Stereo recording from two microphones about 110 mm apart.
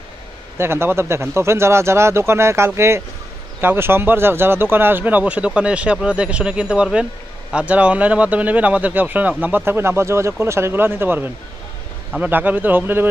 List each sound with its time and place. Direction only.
0.6 s speech: 20° right (ahead or behind)